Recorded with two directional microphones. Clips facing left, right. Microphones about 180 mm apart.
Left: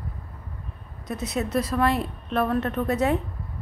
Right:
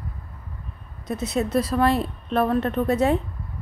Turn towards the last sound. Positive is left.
turn(degrees=-30)  # may be behind; listen again after turning